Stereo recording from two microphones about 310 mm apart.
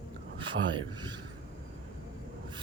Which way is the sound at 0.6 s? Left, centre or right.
Centre.